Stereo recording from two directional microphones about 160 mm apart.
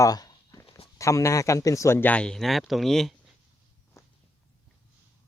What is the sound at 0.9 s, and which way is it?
Speech, 20° left (ahead or behind).